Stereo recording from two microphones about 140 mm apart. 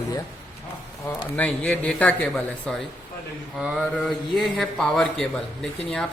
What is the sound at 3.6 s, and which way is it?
A man's voice, 5° right (ahead or behind).